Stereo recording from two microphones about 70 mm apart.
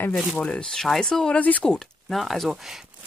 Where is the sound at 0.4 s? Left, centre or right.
Centre.